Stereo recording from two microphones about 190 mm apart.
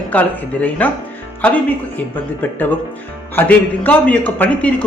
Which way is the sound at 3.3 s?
10° left (ahead or behind).